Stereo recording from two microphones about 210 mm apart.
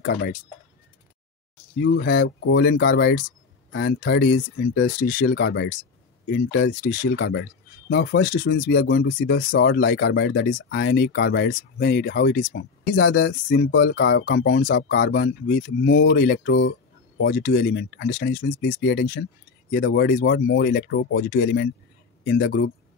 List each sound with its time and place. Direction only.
0.0 s speech: 55° left (ahead or behind)
1.8 s speech: 55° left (ahead or behind)
6.7 s speech: 40° left (ahead or behind)
13.7 s speech: 65° left (ahead or behind); by 19.2 s 45° left (ahead or behind)
19.7 s speech: 55° left (ahead or behind)